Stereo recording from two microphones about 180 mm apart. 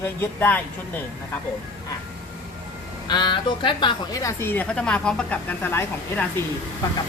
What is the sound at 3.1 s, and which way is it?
Speech, 25° left (ahead or behind).